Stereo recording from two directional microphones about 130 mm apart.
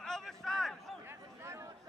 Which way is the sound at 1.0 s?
20° right (ahead or behind).